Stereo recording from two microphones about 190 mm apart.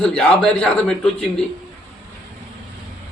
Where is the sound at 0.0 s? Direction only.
5° left (ahead or behind).